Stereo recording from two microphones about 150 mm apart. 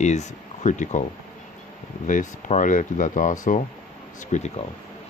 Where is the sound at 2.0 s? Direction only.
55° left (ahead or behind).